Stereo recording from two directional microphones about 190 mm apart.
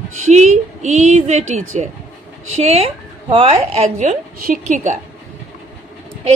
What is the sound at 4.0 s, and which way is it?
A woman's voice, 45° right (ahead or behind).